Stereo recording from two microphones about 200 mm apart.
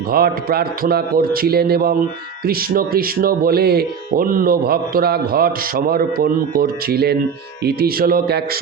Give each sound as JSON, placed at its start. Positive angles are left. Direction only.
{"t": 0.1, "sound": "speech", "side_deg": -50}